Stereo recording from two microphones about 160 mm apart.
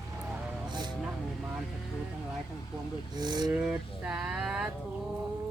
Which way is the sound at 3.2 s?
25° right (ahead or behind).